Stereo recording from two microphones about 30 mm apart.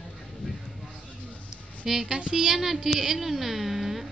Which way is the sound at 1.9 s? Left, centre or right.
Centre.